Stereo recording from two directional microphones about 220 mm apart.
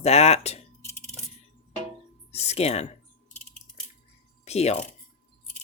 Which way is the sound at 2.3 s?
30° left (ahead or behind).